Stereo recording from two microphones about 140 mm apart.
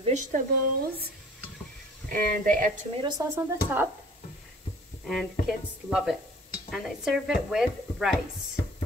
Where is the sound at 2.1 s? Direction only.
90° right.